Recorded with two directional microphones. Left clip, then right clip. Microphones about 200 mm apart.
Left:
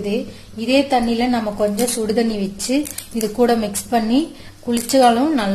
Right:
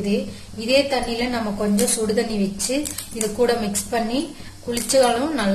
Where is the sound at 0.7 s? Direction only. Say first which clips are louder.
Left 3 dB; 35° left (ahead or behind).